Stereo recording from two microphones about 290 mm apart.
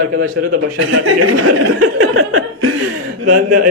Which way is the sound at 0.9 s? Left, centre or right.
Right.